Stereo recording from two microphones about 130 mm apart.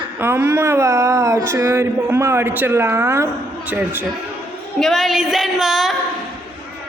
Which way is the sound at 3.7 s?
15° right (ahead or behind).